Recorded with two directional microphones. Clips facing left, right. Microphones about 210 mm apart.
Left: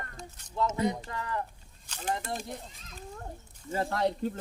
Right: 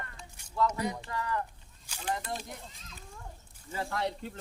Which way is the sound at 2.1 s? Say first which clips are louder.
Left 2 dB; 50° left (ahead or behind).